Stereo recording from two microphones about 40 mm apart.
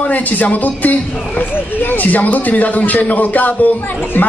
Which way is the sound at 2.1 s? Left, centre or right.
Left.